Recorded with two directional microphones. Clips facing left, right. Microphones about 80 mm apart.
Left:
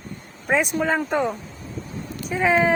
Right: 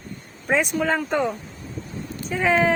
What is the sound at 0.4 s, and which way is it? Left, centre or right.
Speech, centre.